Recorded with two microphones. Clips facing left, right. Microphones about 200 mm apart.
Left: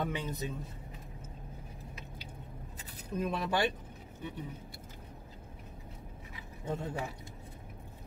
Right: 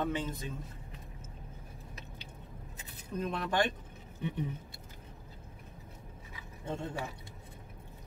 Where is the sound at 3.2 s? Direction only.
5° left (ahead or behind).